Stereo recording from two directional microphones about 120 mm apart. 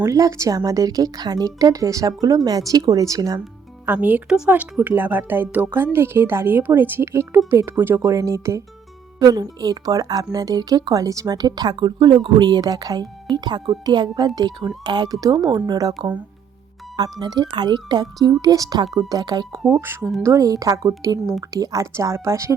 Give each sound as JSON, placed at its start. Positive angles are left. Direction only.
{"t": 0.0, "sound": "speech", "side_deg": -25}
{"t": 3.8, "sound": "a woman's voice", "side_deg": -15}
{"t": 17.0, "sound": "speech", "side_deg": -35}
{"t": 19.8, "sound": "speech", "side_deg": -20}